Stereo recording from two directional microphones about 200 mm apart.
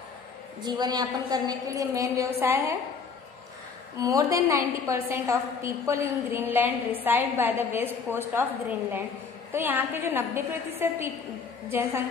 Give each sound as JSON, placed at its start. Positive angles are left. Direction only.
{"t": 0.6, "sound": "a woman's voice", "side_deg": -20}
{"t": 4.0, "sound": "a woman's voice", "side_deg": -15}